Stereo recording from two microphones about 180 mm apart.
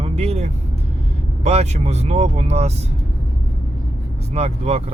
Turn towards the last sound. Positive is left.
turn(degrees=-35)  # may be behind; listen again after turning